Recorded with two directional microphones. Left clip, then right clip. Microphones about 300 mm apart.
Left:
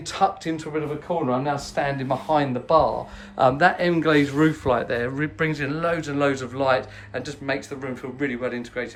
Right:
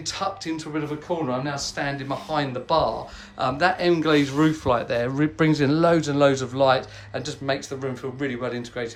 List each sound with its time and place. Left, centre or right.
0.0 s speech: centre